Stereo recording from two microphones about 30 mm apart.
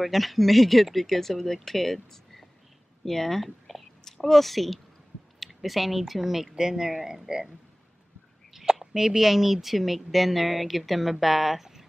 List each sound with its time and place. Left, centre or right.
0.0 s speech: centre
8.5 s speech: centre